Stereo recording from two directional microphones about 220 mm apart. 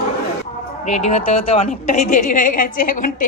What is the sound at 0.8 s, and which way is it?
A woman's voice, 30° left (ahead or behind).